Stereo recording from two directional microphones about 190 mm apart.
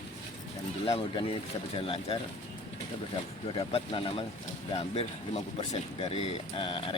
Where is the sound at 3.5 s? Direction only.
30° left (ahead or behind).